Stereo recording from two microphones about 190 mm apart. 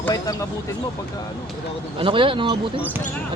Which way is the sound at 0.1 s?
20° left (ahead or behind).